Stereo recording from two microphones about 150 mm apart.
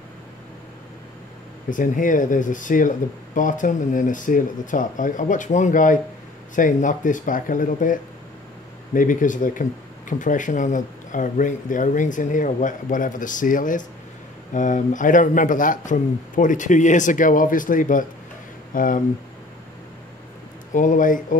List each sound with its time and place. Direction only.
1.7 s speech: 60° left (ahead or behind)
20.7 s speech: 60° left (ahead or behind)